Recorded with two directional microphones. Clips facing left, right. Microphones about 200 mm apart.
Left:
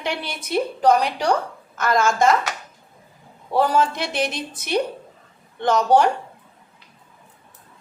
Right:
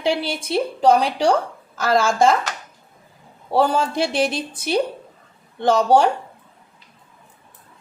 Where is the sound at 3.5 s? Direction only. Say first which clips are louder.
Right 1 dB; 30° right (ahead or behind).